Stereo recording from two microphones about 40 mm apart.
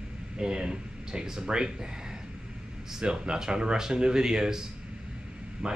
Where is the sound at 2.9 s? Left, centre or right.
Centre.